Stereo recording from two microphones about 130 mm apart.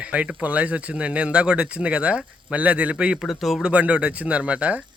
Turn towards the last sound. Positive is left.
turn(degrees=-10)  # may be behind; listen again after turning